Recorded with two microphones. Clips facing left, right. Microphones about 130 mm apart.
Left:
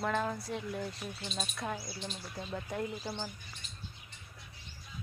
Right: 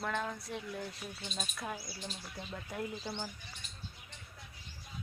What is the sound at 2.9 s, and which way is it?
Speech, 10° left (ahead or behind).